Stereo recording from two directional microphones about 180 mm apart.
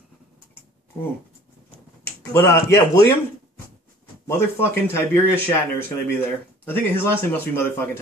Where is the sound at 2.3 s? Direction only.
15° left (ahead or behind).